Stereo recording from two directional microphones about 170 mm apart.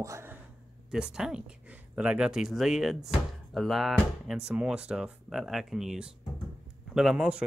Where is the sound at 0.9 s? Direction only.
5° right (ahead or behind).